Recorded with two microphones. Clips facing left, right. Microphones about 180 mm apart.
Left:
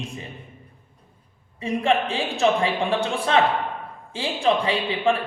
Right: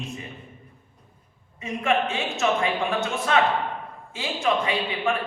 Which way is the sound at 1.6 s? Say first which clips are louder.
Left 2 dB; 30° left (ahead or behind).